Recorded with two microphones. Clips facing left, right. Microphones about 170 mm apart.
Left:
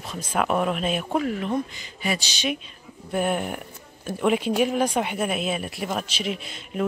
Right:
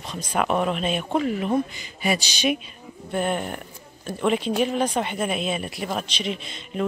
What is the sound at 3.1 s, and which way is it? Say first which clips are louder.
Speech: left 1 dB; 5° left (ahead or behind).